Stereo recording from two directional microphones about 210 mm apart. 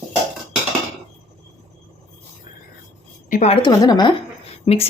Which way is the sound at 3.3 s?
30° left (ahead or behind).